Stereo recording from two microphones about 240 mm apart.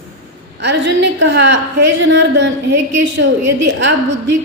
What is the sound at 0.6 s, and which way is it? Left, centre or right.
A woman's voice, right.